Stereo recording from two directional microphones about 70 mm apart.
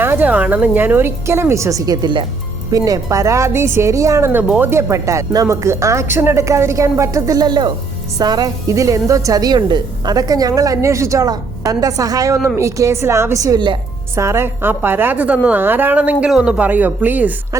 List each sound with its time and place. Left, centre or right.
0.0 s a woman's voice: right
2.7 s a woman's voice: right
4.6 s a woman's voice: right
6.4 s a woman's voice: right
7.3 s speech: right
8.2 s a woman's voice: right
8.6 s a woman's voice: right
11.3 s a woman's voice: right
12.5 s a woman's voice: right
13.4 s a woman's voice: right
14.2 s a woman's voice: right